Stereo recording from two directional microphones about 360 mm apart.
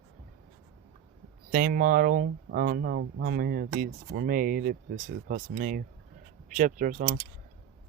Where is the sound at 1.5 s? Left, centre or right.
Right.